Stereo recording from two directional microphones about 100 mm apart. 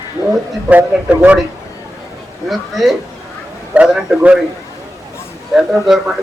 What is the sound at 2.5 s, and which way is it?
A man's voice, centre (ahead or behind).